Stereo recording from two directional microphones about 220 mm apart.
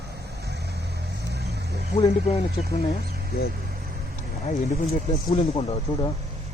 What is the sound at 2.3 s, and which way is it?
Speech, 25° left (ahead or behind).